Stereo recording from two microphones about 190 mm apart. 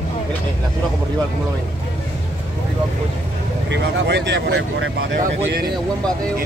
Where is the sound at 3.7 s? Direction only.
70° right (ahead or behind).